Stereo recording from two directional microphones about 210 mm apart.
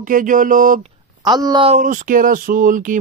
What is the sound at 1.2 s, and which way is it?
Mantra, 20° right (ahead or behind).